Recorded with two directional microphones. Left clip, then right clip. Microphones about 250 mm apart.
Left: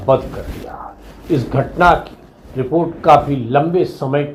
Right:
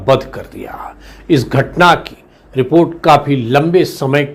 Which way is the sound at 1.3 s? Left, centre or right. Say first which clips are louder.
Right 5 dB; right.